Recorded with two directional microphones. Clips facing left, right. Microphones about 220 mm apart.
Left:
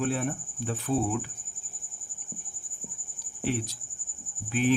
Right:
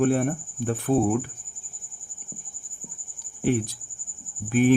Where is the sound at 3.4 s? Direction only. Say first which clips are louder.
Right 7 dB; 50° right (ahead or behind).